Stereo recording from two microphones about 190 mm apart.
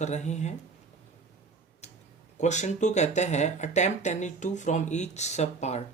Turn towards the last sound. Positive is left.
turn(degrees=35)  # may be behind; listen again after turning